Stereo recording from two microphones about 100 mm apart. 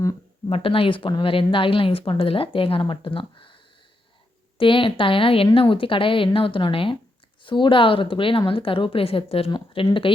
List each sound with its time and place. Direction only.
0.4 s speech: 65° left (ahead or behind)
4.5 s speech: 60° left (ahead or behind); by 9.5 s 75° left (ahead or behind)
9.5 s speech: 60° left (ahead or behind)